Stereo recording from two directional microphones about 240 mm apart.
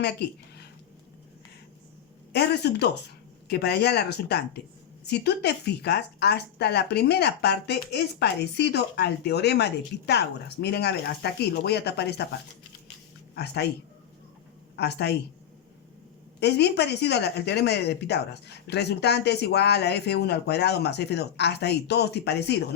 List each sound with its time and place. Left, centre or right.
0.2 s speech: left
2.3 s speech: left
13.3 s speech: left
14.8 s speech: left
16.4 s speech: left